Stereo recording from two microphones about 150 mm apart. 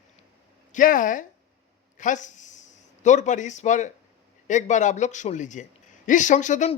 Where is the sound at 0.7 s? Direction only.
65° left (ahead or behind).